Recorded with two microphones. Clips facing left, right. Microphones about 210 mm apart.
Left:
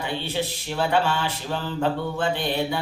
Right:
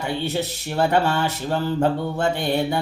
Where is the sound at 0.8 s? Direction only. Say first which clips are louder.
Right 3 dB; 50° right (ahead or behind).